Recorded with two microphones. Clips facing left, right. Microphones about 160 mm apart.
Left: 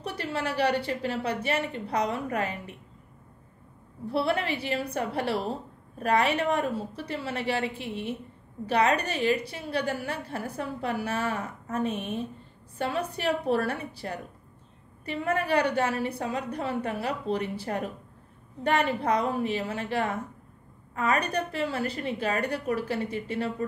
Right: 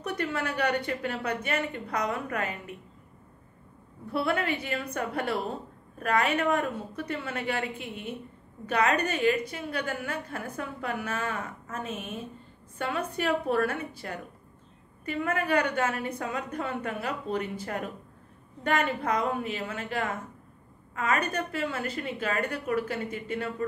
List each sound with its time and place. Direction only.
0.0 s a woman's voice: 30° left (ahead or behind)
4.1 s a woman's voice: 30° left (ahead or behind)